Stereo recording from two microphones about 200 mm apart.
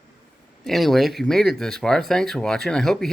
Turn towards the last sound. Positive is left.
turn(degrees=0)  # may be behind; listen again after turning